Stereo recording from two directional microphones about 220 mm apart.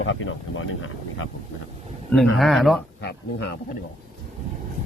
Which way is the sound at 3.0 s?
50° left (ahead or behind).